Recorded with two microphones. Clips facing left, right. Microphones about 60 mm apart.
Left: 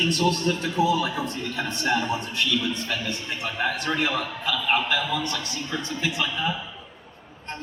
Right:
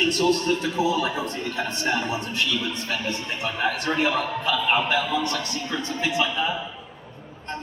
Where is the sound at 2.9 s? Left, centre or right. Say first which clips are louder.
Right 1 dB; right.